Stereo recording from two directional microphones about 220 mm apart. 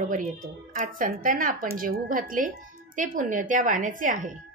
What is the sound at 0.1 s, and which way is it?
A woman's voice, 35° right (ahead or behind).